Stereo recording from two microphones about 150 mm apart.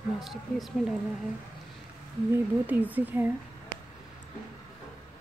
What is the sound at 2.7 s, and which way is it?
Speech, 10° right (ahead or behind).